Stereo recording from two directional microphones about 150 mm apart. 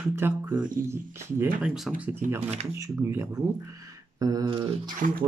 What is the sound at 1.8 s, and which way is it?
Speech, 5° right (ahead or behind).